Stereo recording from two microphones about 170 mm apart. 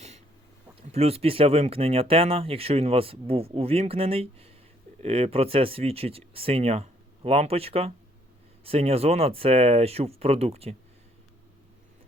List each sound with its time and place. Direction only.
0.8 s speech: 35° right (ahead or behind)